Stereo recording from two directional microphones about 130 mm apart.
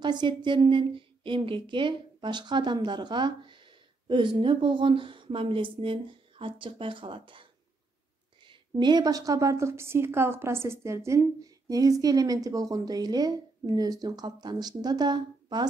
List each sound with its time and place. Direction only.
0.0 s a woman's voice: 35° right (ahead or behind)
8.5 s a woman's voice: 35° right (ahead or behind)